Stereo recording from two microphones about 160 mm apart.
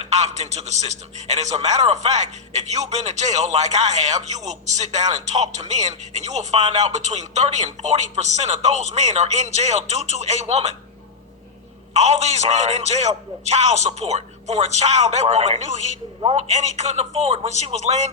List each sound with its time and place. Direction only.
0.0 s a man's voice: 45° right (ahead or behind)
11.9 s a man's voice: 45° right (ahead or behind)